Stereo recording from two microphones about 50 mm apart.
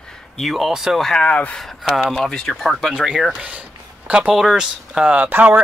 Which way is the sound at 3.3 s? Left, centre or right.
Right.